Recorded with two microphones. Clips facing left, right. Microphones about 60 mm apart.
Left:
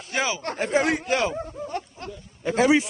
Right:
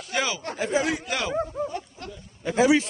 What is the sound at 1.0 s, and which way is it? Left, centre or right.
Speech, left.